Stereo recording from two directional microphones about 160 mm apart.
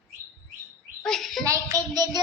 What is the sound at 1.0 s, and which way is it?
Speech, centre (ahead or behind).